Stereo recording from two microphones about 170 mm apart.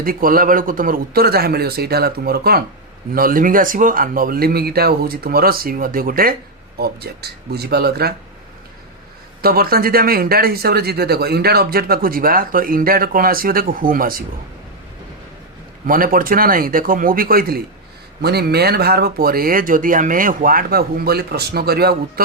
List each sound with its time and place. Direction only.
0.0 s speech: 55° right (ahead or behind)
9.4 s speech: 60° right (ahead or behind)
15.9 s speech: 55° right (ahead or behind)